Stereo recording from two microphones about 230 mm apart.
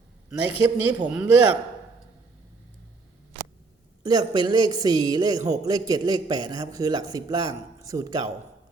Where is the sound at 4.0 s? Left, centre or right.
Centre.